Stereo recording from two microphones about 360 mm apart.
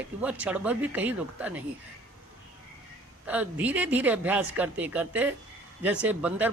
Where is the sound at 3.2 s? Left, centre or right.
Centre.